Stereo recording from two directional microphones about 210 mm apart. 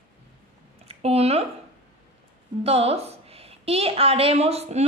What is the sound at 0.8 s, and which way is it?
Speech, 30° right (ahead or behind).